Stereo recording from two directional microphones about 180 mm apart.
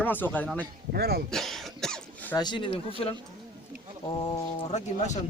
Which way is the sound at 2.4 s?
25° left (ahead or behind).